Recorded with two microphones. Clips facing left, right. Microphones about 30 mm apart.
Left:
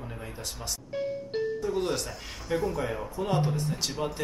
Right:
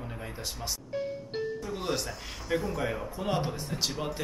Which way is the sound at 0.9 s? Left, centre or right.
Centre.